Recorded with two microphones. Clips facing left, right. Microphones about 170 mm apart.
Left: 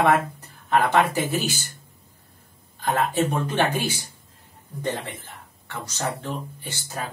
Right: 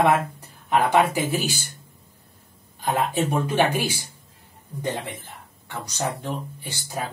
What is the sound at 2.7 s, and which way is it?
Speech, 15° right (ahead or behind).